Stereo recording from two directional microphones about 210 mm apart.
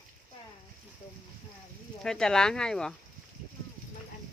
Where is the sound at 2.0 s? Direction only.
5° left (ahead or behind).